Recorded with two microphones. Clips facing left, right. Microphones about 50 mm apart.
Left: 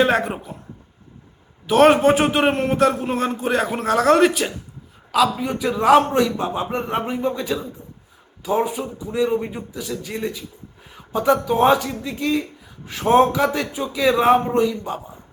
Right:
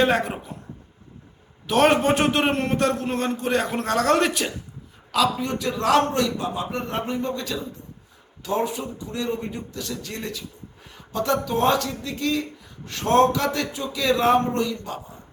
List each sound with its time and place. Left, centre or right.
0.0 s a man's voice: centre
1.6 s a man's voice: centre
6.3 s speech: left